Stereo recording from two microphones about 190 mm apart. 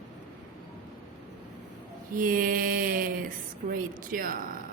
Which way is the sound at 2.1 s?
45° right (ahead or behind).